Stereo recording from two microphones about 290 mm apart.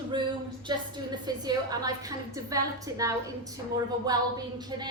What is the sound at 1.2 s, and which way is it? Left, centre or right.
A woman's voice, centre.